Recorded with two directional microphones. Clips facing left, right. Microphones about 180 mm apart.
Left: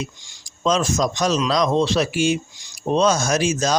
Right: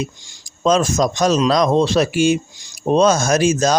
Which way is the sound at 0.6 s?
45° right (ahead or behind).